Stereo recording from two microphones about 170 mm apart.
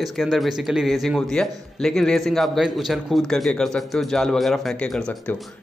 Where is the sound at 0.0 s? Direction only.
Centre (ahead or behind).